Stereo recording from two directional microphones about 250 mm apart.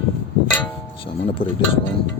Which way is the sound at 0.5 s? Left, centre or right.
Centre.